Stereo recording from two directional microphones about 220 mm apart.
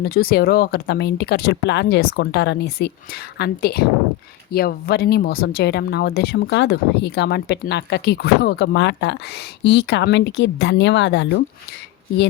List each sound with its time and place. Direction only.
0.0 s speech: 45° left (ahead or behind)